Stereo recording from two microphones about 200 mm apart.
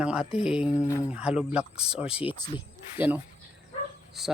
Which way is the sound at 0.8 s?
15° left (ahead or behind).